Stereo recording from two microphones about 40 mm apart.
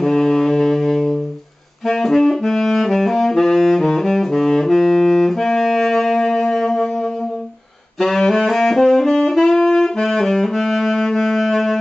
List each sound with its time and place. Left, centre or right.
0.0 s music: centre
1.9 s saxophone: centre
8.7 s saxophone: centre